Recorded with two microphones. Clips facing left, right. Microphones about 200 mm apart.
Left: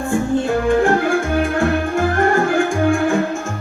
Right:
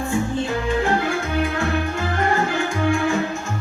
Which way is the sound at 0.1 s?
50° left (ahead or behind).